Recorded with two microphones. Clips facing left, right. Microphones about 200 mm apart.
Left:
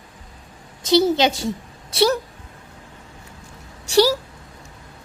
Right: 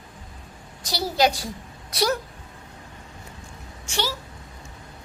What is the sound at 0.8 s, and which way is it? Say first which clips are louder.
A woman's voice: left 6 dB; 25° left (ahead or behind).